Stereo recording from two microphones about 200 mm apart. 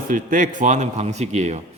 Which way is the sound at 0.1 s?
40° right (ahead or behind).